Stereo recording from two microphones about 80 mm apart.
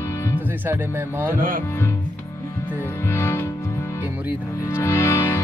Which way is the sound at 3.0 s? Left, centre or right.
Left.